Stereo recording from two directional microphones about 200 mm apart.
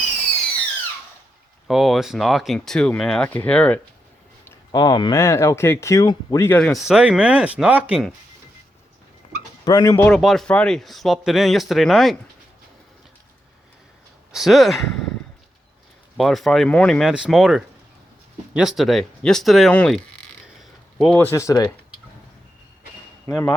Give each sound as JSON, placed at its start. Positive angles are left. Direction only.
{"t": 1.6, "sound": "speech", "side_deg": 0}
{"t": 4.4, "sound": "speech", "side_deg": 20}
{"t": 9.6, "sound": "speech", "side_deg": 20}
{"t": 10.1, "sound": "speech", "side_deg": 0}
{"t": 14.3, "sound": "speech", "side_deg": 0}
{"t": 16.1, "sound": "speech", "side_deg": 0}
{"t": 23.3, "sound": "speech", "side_deg": 10}